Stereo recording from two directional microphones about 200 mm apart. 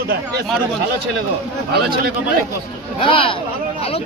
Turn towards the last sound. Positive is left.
turn(degrees=25)  # may be behind; listen again after turning